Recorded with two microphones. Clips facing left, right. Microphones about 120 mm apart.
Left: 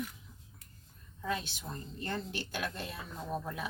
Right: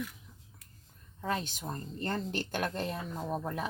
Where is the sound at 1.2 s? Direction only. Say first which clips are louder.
Right 3 dB; 45° right (ahead or behind).